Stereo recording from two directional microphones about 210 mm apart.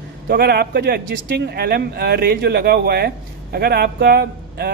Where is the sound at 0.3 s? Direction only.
50° right (ahead or behind).